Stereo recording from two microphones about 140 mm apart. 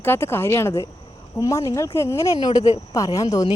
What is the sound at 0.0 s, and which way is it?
Speech, 15° left (ahead or behind).